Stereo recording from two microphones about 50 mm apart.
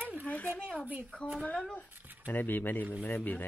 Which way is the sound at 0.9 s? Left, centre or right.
Right.